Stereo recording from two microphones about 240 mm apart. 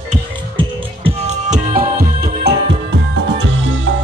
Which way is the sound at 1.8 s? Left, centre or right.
Right.